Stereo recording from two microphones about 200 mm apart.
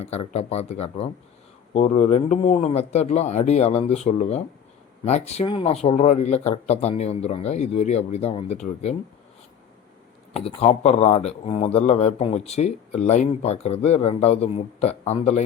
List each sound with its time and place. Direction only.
0.0 s speech: 30° left (ahead or behind)
10.3 s speech: 30° left (ahead or behind)